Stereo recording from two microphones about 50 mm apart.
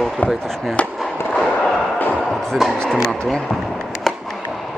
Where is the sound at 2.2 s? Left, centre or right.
Centre.